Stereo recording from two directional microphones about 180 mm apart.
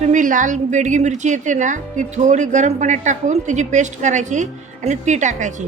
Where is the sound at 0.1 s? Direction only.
45° right (ahead or behind).